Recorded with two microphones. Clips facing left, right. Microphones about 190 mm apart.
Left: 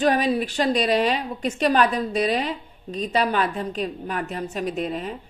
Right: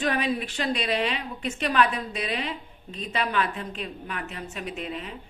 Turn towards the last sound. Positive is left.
turn(degrees=40)  # may be behind; listen again after turning